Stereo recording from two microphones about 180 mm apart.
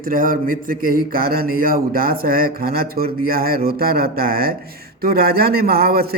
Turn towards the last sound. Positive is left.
turn(degrees=-60)  # may be behind; listen again after turning